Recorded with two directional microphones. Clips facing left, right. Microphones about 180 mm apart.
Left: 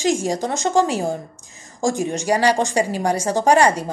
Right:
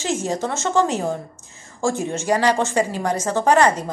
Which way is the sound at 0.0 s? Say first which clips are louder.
Left 3 dB; 10° left (ahead or behind).